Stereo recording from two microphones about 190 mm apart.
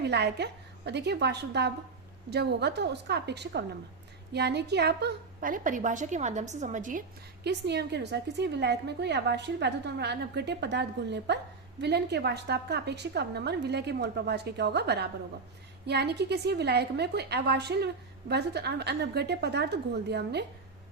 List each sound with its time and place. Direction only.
0.0 s a woman's voice: 60° right (ahead or behind); by 7.0 s 40° right (ahead or behind)
7.4 s a woman's voice: 60° right (ahead or behind)